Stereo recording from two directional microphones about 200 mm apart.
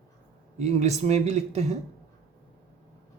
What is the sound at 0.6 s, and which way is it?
Speech, 35° right (ahead or behind).